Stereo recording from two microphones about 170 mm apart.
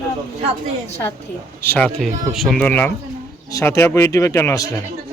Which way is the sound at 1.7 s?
5° left (ahead or behind).